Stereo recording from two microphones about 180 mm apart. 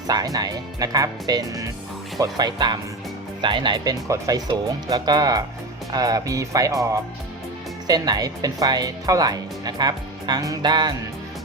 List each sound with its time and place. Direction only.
0.1 s speech: 20° right (ahead or behind)